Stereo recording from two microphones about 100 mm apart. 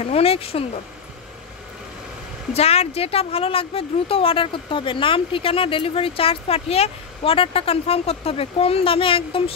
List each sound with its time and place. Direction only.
0.0 s speech: 80° left
2.5 s speech: 90° left; by 9.4 s 65° left (ahead or behind)